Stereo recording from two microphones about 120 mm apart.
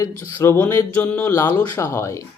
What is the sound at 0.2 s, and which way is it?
Mantra, 20° left (ahead or behind).